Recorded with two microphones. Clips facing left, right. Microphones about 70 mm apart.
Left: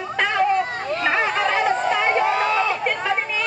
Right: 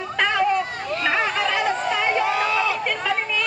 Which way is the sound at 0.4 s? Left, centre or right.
Left.